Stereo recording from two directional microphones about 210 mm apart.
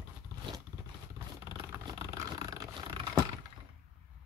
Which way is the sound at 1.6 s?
20° right (ahead or behind).